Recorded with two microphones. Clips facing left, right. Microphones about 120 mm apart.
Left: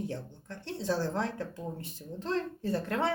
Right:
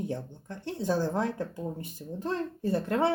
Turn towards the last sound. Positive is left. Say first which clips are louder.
# right 4 dB
turn(degrees=-15)  # may be behind; listen again after turning